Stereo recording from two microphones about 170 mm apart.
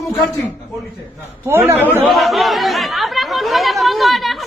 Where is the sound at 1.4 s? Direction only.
15° right (ahead or behind).